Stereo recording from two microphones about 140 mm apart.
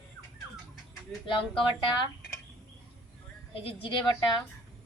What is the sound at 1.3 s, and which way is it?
Speech, 35° left (ahead or behind).